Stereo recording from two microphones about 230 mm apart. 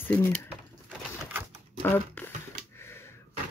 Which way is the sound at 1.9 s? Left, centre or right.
Centre.